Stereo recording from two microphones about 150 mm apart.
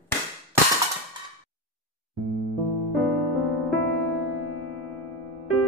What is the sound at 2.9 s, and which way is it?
Music, centre (ahead or behind).